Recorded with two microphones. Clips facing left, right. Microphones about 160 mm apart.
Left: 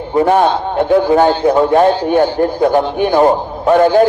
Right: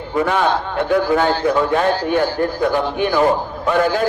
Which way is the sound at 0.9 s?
25° left (ahead or behind).